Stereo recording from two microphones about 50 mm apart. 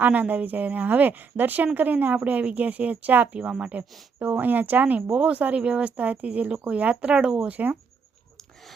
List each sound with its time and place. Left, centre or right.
0.0 s a woman's voice: right
3.3 s speech: right
4.2 s a woman's voice: right; by 7.5 s centre
7.5 s a woman's voice: right